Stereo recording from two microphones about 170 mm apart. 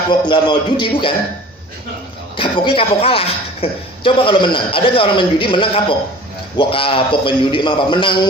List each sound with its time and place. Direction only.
0.1 s a woman's voice: 25° left (ahead or behind)
2.3 s a woman's voice: 30° left (ahead or behind)